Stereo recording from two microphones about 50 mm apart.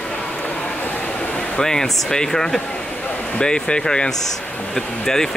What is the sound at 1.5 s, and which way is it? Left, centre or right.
Speech, centre.